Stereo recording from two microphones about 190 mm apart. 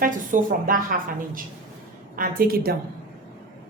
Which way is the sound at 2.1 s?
50° right (ahead or behind).